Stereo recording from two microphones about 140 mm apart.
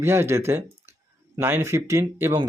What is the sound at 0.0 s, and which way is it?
Speech, 20° right (ahead or behind).